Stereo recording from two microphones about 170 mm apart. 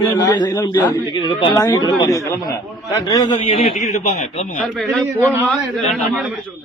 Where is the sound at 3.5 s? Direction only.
45° left (ahead or behind).